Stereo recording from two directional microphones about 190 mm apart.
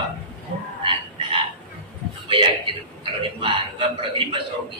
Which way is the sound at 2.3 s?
25° right (ahead or behind).